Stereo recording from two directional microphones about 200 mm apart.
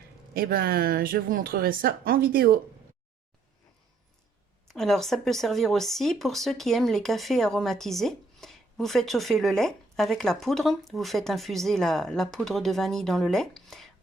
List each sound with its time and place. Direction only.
0.3 s a woman's voice: 50° right (ahead or behind)
4.7 s speech: centre (ahead or behind)